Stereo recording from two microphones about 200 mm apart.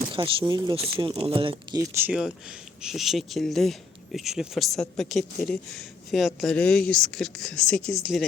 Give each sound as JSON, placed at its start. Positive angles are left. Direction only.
{"t": 0.1, "sound": "speech", "side_deg": -25}
{"t": 1.9, "sound": "speech", "side_deg": -10}